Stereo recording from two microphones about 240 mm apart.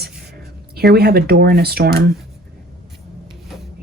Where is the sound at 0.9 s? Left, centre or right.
Right.